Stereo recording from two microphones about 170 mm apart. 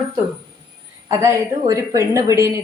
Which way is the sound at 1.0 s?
15° right (ahead or behind).